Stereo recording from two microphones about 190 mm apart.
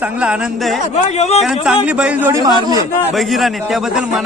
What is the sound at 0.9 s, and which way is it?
Speech, 35° left (ahead or behind).